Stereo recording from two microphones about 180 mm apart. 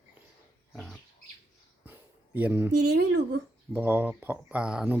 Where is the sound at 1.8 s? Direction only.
10° right (ahead or behind).